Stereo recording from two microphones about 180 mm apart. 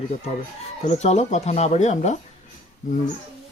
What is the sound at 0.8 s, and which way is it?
Speech, 40° left (ahead or behind).